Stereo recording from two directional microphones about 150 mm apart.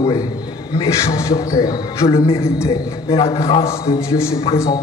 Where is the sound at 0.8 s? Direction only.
20° left (ahead or behind).